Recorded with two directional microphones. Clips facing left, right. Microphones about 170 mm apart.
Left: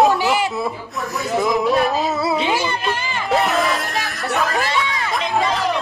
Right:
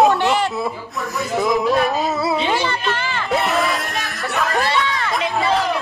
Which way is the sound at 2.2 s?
Centre (ahead or behind).